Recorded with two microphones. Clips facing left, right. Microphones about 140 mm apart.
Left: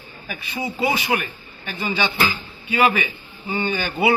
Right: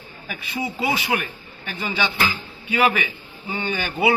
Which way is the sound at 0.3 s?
10° right (ahead or behind).